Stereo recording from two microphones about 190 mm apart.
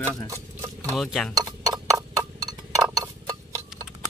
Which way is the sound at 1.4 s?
15° right (ahead or behind).